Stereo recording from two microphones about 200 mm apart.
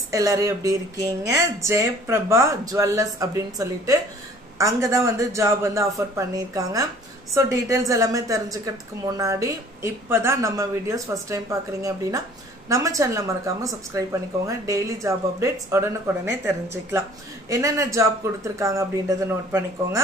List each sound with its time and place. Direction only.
0.1 s a woman's voice: 15° right (ahead or behind)